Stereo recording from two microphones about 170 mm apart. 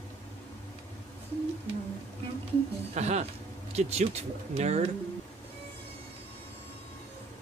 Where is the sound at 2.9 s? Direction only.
40° right (ahead or behind).